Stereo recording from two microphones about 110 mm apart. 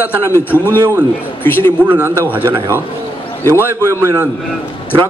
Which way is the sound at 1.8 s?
15° right (ahead or behind).